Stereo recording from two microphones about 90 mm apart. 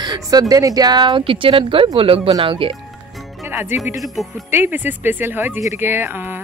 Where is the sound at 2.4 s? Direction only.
75° right (ahead or behind).